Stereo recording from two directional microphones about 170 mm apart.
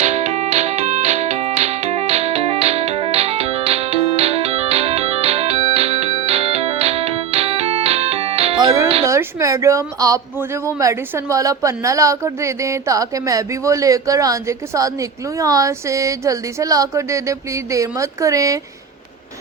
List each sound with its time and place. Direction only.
0.0 s music: 40° right (ahead or behind)
9.0 s speech: 20° right (ahead or behind)